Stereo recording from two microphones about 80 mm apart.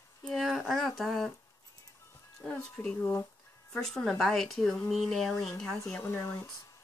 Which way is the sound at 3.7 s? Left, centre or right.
Centre.